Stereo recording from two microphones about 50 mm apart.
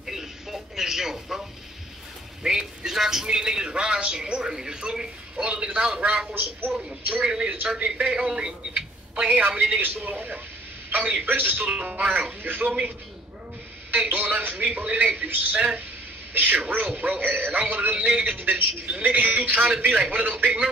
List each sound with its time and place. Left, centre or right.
0.0 s a sound: centre
2.4 s a man's voice: centre
7.2 s a man's voice: centre
8.7 s a sound: centre
9.6 s a man's voice: right
13.9 s speech: right
14.7 s a man's voice: right